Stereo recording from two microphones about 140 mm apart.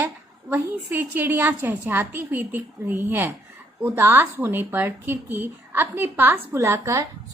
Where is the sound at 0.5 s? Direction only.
15° right (ahead or behind).